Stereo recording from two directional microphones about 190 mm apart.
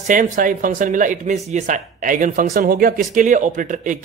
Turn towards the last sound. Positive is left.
turn(degrees=-40)  # may be behind; listen again after turning